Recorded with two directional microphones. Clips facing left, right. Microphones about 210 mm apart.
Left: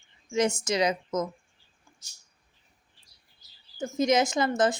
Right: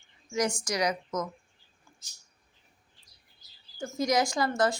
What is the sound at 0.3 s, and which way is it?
Speech, 25° left (ahead or behind).